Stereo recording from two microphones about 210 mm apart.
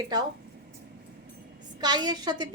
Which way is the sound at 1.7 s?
20° right (ahead or behind).